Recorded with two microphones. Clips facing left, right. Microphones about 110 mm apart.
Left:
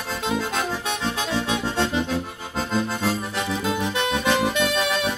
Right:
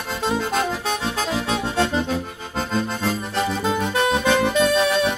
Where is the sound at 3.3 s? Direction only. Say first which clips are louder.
Right 3 dB; 35° right (ahead or behind).